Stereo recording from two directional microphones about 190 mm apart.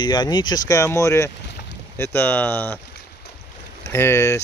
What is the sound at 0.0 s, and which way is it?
Speech, 20° left (ahead or behind).